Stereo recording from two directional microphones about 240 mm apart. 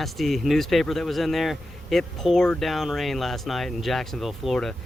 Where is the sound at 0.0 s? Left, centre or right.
Centre.